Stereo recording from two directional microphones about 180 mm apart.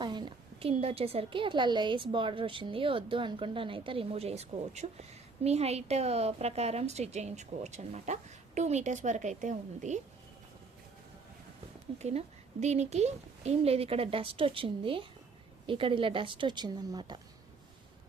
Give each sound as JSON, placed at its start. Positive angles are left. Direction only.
{"t": 0.0, "sound": "a woman's voice", "side_deg": -25}
{"t": 11.9, "sound": "a woman's voice", "side_deg": -35}